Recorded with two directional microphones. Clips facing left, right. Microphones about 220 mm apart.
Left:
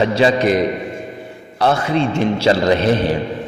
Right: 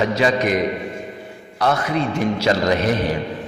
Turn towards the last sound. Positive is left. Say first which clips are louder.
# left 4 dB
turn(degrees=30)  # may be behind; listen again after turning